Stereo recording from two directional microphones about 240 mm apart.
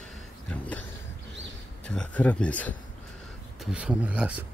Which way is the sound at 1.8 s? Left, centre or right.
Centre.